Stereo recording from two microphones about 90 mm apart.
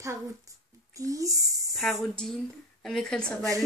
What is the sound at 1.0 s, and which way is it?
Speech, 40° right (ahead or behind).